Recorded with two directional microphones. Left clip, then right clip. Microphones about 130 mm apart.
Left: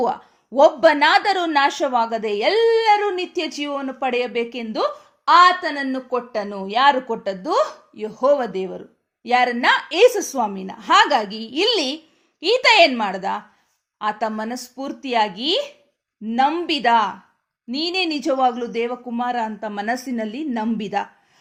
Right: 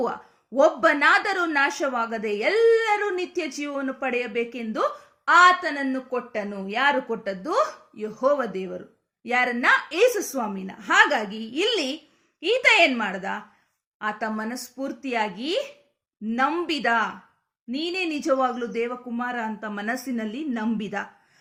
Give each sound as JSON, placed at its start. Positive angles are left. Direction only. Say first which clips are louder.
{"t": 0.0, "sound": "speech", "louder": "left 6 dB", "side_deg": 30}